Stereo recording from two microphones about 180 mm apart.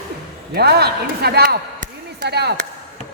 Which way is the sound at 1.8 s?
65° right (ahead or behind).